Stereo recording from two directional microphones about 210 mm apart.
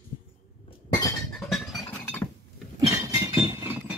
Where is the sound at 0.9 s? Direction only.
15° left (ahead or behind).